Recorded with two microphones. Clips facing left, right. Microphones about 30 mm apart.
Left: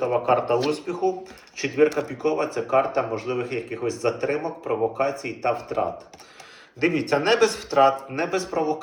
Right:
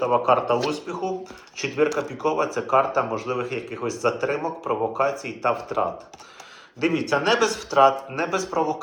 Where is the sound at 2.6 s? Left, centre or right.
Centre.